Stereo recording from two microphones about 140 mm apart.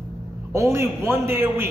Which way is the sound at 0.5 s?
20° right (ahead or behind).